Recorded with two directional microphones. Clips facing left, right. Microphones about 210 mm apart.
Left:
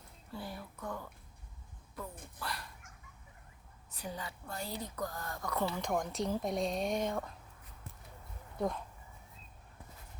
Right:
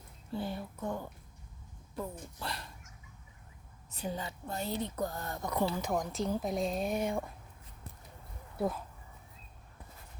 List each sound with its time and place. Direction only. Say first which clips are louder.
0.3 s a woman's voice: right 7 dB; 25° right (ahead or behind)
2.4 s speech: right 1 dB; 25° right (ahead or behind)
3.9 s a woman's voice: right 5 dB; 25° right (ahead or behind)
5.7 s speech: right 1 dB; 5° right (ahead or behind)
8.5 s speech: right 2 dB; 5° right (ahead or behind)